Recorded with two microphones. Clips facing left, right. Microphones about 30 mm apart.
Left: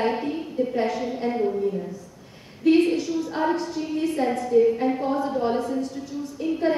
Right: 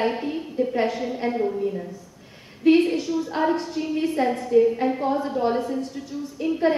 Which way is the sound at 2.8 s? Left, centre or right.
Centre.